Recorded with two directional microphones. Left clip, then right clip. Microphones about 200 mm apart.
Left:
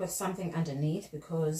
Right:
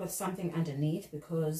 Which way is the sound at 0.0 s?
15° right (ahead or behind).